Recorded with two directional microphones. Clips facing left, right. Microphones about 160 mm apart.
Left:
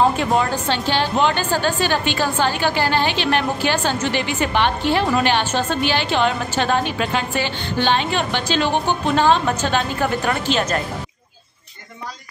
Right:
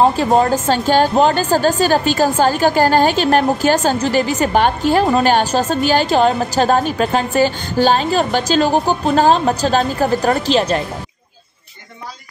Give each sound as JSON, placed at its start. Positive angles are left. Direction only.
{"t": 0.0, "sound": "a woman's voice", "side_deg": -35}